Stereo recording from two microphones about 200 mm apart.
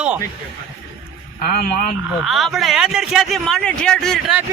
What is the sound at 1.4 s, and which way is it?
Speech, 45° left (ahead or behind).